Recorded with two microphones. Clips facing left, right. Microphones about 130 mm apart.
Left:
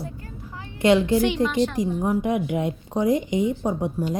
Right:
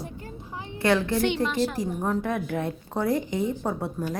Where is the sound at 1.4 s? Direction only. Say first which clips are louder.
Left 3 dB; centre (ahead or behind).